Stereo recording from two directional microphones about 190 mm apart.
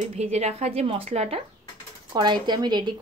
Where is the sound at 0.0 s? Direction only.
35° right (ahead or behind).